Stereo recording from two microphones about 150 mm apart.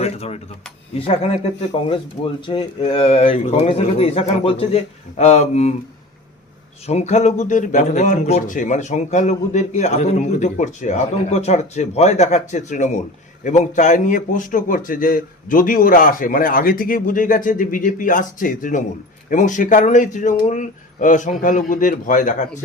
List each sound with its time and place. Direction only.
0.0 s a sound: 45° left (ahead or behind)
0.9 s speech: 40° left (ahead or behind)
2.5 s speech: 40° left (ahead or behind)
6.8 s a man's voice: 45° left (ahead or behind)